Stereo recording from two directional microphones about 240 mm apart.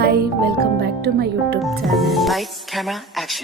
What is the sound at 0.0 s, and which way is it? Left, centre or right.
Speech, right.